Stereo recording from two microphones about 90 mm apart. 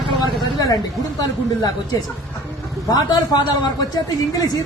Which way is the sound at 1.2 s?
45° left (ahead or behind).